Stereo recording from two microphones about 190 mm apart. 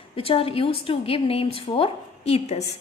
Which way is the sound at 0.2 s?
30° left (ahead or behind).